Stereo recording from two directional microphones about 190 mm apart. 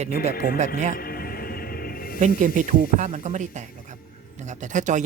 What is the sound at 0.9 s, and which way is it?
Music, 50° left (ahead or behind).